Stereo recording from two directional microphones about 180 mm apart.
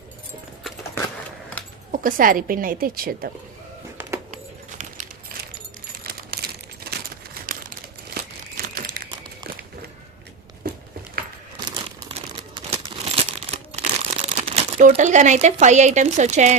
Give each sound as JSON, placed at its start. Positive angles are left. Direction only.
{"t": 1.9, "sound": "a woman's voice", "side_deg": -50}
{"t": 6.0, "sound": "a sound", "side_deg": -60}
{"t": 7.4, "sound": "crumpling", "side_deg": -55}
{"t": 10.6, "sound": "a sound", "side_deg": -55}
{"t": 11.7, "sound": "crumpling", "side_deg": -25}
{"t": 14.8, "sound": "speech", "side_deg": -45}